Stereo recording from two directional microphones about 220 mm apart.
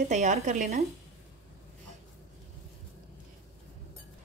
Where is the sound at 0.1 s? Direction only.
30° right (ahead or behind).